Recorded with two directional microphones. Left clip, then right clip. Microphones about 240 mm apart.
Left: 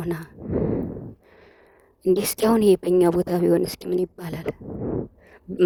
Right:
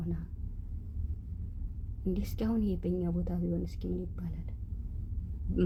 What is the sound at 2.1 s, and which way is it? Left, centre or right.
Speech, left.